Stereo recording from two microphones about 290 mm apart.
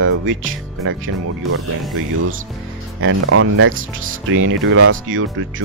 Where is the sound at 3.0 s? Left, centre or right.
Right.